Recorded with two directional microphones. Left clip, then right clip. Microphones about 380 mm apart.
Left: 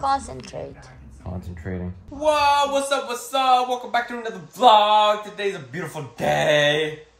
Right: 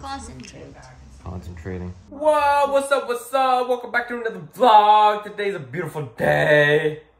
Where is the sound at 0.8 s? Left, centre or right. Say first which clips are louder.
Even; centre.